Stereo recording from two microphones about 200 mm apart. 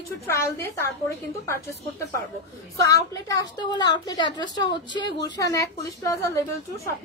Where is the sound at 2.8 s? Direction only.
15° left (ahead or behind).